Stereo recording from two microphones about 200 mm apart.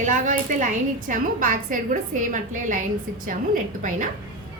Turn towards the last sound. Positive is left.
turn(degrees=-40)  # may be behind; listen again after turning